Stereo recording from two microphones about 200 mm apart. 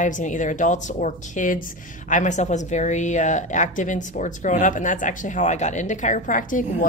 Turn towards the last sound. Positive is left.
turn(degrees=40)  # may be behind; listen again after turning